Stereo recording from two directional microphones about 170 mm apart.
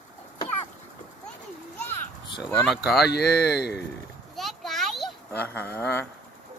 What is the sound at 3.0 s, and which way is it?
Speech, 70° left (ahead or behind).